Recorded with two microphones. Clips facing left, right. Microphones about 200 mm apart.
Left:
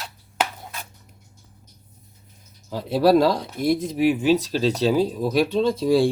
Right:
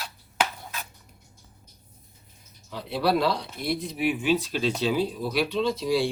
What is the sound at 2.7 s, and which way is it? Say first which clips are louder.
Speech: left 8 dB; 40° left (ahead or behind).